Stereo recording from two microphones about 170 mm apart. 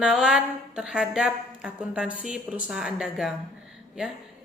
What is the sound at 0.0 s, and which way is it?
Speech, 5° right (ahead or behind).